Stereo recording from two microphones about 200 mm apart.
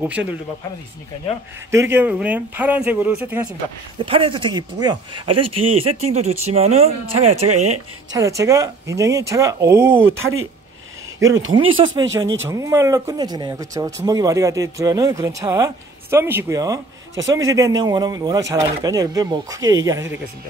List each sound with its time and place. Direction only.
0.0 s speech: 5° right (ahead or behind)
1.7 s speech: 10° right (ahead or behind)
4.0 s speech: 25° right (ahead or behind)
8.1 s speech: 15° right (ahead or behind)
10.1 s speech: 85° right
11.1 s speech: 15° right (ahead or behind)
17.2 s a man's voice: 70° right (ahead or behind)
17.5 s speech: 15° right (ahead or behind)